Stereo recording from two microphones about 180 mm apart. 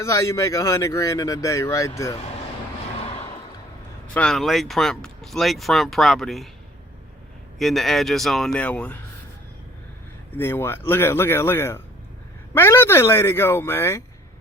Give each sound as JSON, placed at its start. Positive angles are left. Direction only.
{"t": 0.0, "sound": "speech", "side_deg": 15}
{"t": 4.1, "sound": "speech", "side_deg": 5}
{"t": 7.6, "sound": "speech", "side_deg": 0}
{"t": 10.3, "sound": "speech", "side_deg": 10}